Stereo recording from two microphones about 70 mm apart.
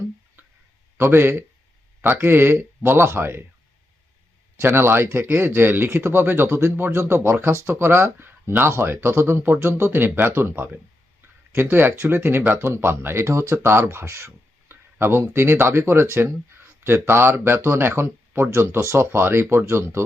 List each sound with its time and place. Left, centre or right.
0.9 s speech: right
4.5 s speech: right